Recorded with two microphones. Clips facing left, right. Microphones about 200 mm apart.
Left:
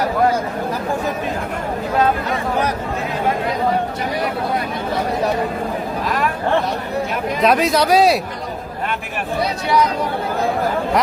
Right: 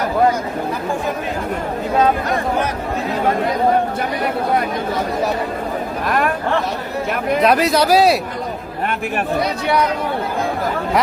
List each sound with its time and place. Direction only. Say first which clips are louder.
6.1 s speech: right 3 dB; 55° right (ahead or behind)
7.4 s a man's voice: even; centre (ahead or behind)